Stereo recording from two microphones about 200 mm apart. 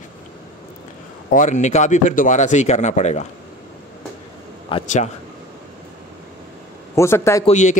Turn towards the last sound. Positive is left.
turn(degrees=35)  # may be behind; listen again after turning